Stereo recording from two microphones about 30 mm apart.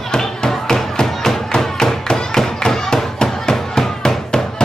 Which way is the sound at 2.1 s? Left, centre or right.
Left.